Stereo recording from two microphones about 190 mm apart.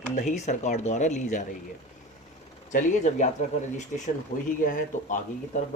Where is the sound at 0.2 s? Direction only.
40° left (ahead or behind).